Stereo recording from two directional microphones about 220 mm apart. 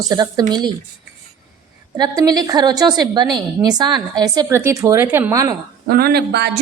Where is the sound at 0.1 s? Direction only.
20° right (ahead or behind).